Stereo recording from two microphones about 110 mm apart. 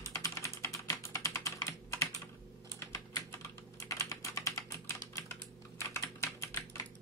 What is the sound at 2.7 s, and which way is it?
Typing, 30° left (ahead or behind).